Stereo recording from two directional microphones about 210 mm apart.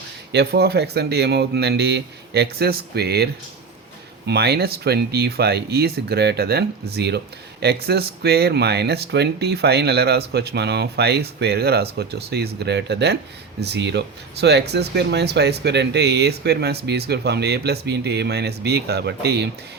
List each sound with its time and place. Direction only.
0.3 s speech: 50° right (ahead or behind)
4.3 s speech: 50° right (ahead or behind)